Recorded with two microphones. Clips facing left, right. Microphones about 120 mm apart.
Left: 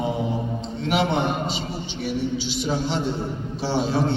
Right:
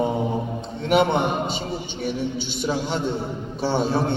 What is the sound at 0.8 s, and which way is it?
Speech, 50° right (ahead or behind).